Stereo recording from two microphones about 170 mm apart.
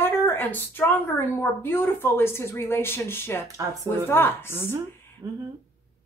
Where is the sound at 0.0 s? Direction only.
15° left (ahead or behind).